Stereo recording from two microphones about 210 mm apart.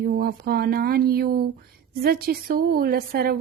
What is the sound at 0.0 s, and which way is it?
A woman's voice, 50° right (ahead or behind).